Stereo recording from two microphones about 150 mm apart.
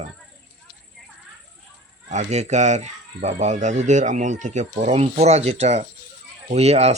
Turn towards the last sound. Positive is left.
turn(degrees=-45)  # may be behind; listen again after turning